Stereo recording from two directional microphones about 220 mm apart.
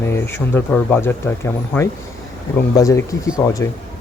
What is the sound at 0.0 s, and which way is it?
Speech, 10° left (ahead or behind).